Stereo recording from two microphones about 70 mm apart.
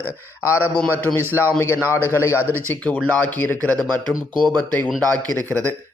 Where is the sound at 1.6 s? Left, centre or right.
Left.